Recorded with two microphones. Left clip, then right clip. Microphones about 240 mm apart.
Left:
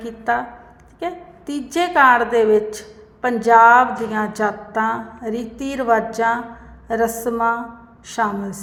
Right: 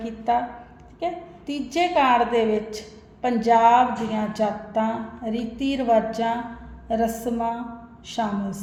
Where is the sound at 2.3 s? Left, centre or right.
Left.